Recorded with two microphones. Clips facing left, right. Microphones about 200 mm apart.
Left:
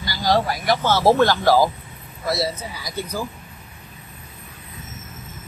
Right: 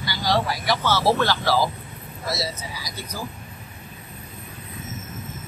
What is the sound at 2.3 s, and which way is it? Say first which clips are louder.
Speech: left 5 dB; 55° left (ahead or behind).